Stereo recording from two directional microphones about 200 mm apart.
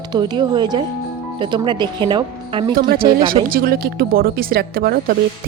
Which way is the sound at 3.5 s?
50° right (ahead or behind).